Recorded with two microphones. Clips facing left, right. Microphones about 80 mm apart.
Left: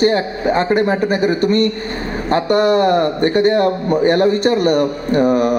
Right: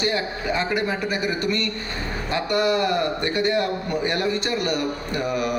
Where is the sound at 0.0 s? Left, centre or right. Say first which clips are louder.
Left 10 dB; left.